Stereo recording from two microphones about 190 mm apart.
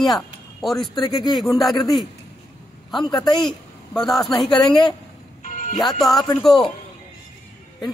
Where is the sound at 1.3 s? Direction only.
Centre (ahead or behind).